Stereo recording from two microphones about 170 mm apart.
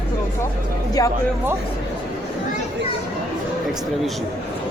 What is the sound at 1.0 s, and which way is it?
Speech, 20° left (ahead or behind).